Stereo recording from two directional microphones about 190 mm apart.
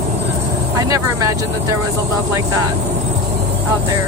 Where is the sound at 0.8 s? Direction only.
20° right (ahead or behind).